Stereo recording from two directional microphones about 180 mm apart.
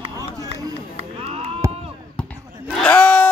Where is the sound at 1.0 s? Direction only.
35° right (ahead or behind).